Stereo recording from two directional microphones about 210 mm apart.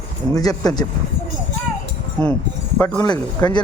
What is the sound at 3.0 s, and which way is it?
Speech, 20° left (ahead or behind).